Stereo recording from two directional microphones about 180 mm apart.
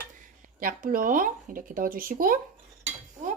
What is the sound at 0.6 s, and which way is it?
Speech, 50° right (ahead or behind).